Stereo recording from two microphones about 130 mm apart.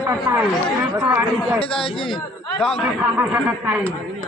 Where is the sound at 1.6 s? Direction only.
45° left (ahead or behind).